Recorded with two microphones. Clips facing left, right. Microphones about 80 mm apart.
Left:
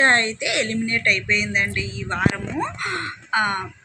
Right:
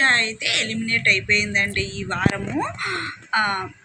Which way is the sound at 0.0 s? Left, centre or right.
Left.